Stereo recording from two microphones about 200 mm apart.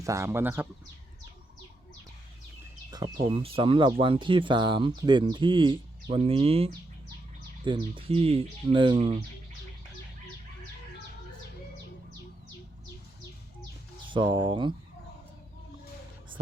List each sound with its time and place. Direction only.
0.0 s speech: 15° right (ahead or behind)
2.9 s speech: 25° right (ahead or behind)
14.1 s speech: 25° right (ahead or behind)